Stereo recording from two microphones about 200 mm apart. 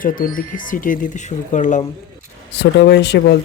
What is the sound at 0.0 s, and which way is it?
Speech, 40° left (ahead or behind).